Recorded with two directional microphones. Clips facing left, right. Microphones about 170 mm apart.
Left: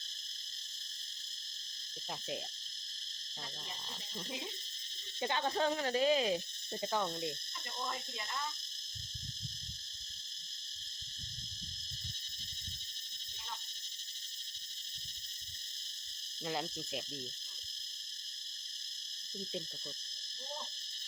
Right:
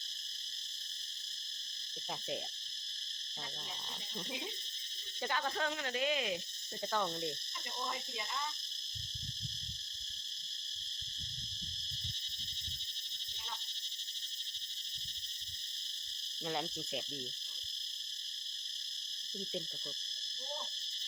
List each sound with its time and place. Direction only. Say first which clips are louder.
5.2 s speech: left 3 dB; 25° left (ahead or behind)
6.8 s cricket: even; 10° left (ahead or behind)
16.5 s cricket: even; centre (ahead or behind)